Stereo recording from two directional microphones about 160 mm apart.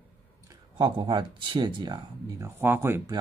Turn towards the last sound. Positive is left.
turn(degrees=-15)  # may be behind; listen again after turning